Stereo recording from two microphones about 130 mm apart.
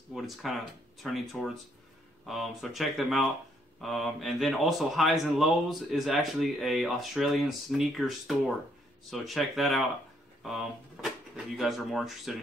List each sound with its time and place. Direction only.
0.1 s a man's voice: centre (ahead or behind)